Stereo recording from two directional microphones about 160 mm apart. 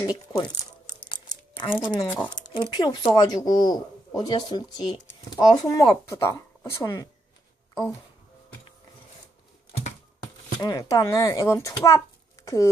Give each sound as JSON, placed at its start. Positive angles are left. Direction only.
{"t": 0.0, "sound": "speech", "side_deg": 25}
{"t": 1.1, "sound": "crumpling", "side_deg": 30}
{"t": 1.8, "sound": "speech", "side_deg": 25}
{"t": 2.0, "sound": "speech", "side_deg": 10}
{"t": 2.3, "sound": "speech", "side_deg": 30}
{"t": 10.6, "sound": "speech", "side_deg": 25}